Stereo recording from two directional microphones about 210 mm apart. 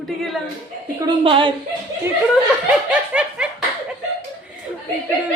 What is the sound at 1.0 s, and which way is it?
Speech, 25° right (ahead or behind).